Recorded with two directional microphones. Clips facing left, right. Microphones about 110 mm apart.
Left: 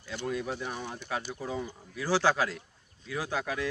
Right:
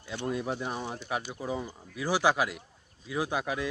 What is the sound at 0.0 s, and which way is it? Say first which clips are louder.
Speech: right 1 dB; 20° right (ahead or behind).